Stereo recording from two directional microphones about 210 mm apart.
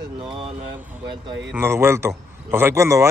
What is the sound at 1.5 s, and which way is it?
A man's voice, 10° right (ahead or behind).